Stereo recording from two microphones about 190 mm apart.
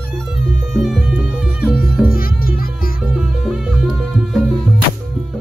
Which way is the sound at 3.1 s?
Centre (ahead or behind).